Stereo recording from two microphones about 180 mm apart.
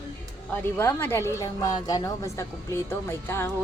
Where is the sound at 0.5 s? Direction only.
10° left (ahead or behind).